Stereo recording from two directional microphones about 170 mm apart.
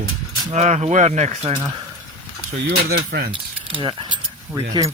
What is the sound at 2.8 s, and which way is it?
Speech, 65° right (ahead or behind).